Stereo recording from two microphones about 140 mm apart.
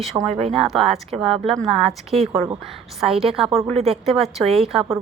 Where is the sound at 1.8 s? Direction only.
50° right (ahead or behind).